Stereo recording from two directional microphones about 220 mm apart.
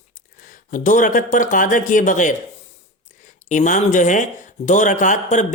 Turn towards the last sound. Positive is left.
turn(degrees=35)  # may be behind; listen again after turning